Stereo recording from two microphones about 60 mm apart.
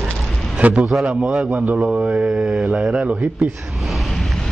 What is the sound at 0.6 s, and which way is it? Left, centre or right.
Speech, right.